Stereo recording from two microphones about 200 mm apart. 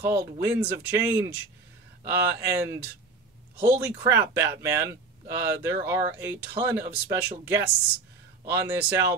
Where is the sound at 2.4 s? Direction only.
15° right (ahead or behind).